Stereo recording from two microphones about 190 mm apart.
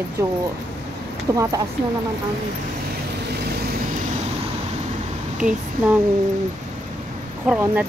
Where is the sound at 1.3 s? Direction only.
15° right (ahead or behind).